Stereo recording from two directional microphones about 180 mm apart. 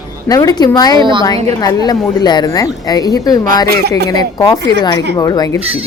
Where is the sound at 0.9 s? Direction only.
25° right (ahead or behind).